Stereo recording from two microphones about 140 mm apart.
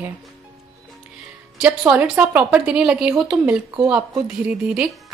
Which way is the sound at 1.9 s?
10° right (ahead or behind).